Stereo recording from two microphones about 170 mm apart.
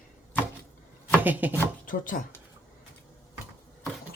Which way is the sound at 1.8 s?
55° left (ahead or behind).